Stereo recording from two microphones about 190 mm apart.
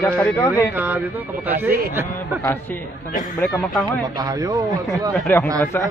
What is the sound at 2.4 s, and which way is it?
Speech, 15° left (ahead or behind).